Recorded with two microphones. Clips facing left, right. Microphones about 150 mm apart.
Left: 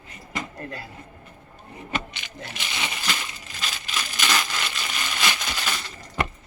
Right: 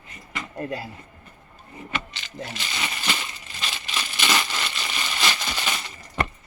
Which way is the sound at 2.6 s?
15° left (ahead or behind).